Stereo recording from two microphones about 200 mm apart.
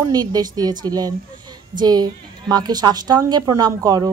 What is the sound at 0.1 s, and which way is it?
A woman's voice, 20° right (ahead or behind).